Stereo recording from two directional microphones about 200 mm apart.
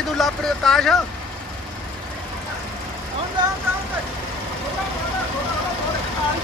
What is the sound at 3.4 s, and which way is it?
Speech, 20° right (ahead or behind).